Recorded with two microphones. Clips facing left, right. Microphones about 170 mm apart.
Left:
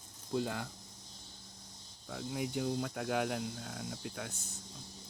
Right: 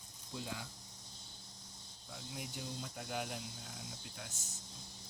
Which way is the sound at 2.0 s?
60° left (ahead or behind).